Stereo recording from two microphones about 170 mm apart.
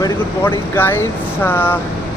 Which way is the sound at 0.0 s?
15° left (ahead or behind).